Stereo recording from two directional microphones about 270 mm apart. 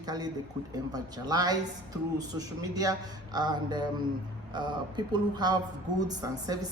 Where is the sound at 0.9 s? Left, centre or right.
Centre.